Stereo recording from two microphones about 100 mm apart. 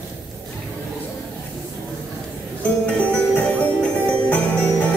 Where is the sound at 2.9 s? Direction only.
15° left (ahead or behind).